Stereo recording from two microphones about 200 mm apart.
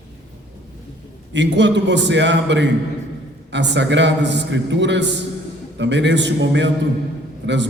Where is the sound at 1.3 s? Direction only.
65° right (ahead or behind).